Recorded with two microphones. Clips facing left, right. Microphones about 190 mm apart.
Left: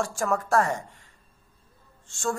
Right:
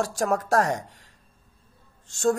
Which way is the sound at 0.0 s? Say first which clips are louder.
Right 2 dB; 40° right (ahead or behind).